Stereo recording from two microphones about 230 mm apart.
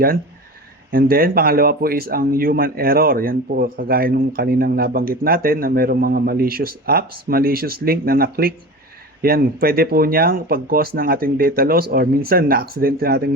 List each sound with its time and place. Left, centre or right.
0.9 s speech: right